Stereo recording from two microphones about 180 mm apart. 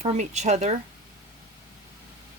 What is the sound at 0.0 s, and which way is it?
Speech, 40° right (ahead or behind).